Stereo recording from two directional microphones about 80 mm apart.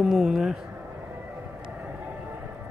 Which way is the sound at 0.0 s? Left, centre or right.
Centre.